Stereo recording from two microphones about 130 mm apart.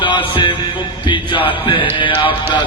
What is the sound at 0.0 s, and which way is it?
Music, 40° left (ahead or behind).